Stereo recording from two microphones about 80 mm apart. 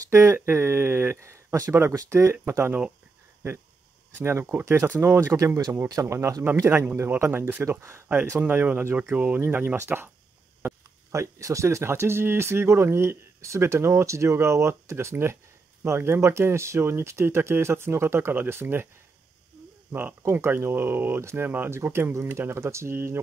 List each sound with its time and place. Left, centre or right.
0.1 s speech: right
4.2 s speech: right
5.9 s speech: right
6.5 s speech: right
19.9 s speech: right